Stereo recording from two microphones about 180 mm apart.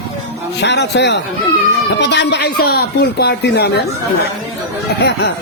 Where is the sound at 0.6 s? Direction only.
70° left (ahead or behind).